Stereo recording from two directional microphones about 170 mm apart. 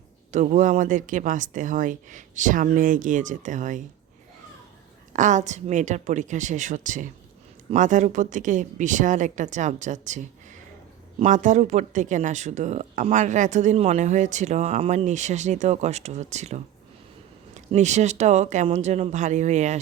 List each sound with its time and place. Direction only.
0.3 s speech: 45° right (ahead or behind)
5.1 s speech: 45° right (ahead or behind)
11.2 s speech: 45° right (ahead or behind)